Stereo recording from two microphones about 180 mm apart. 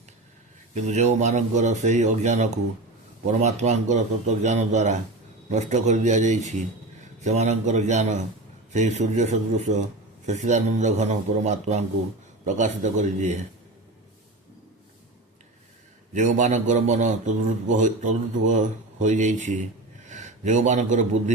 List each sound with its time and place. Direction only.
0.7 s speech: 40° right (ahead or behind)
16.1 s a man's voice: 45° right (ahead or behind)